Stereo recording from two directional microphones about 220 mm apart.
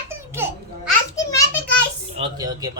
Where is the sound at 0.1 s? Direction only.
10° right (ahead or behind).